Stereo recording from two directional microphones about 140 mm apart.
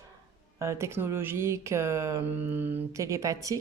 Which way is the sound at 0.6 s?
20° right (ahead or behind).